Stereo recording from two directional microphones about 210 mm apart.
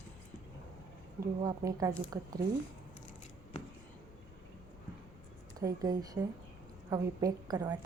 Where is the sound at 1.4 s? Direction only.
15° right (ahead or behind).